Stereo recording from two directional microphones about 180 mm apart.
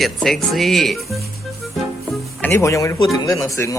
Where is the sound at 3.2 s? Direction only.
20° left (ahead or behind).